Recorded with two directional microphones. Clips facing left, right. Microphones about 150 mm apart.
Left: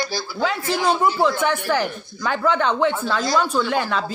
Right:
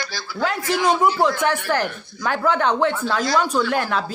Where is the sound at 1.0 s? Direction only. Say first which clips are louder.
Right 1 dB; 10° right (ahead or behind).